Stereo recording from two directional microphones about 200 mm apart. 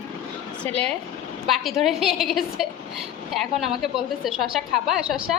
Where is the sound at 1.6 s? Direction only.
Centre (ahead or behind).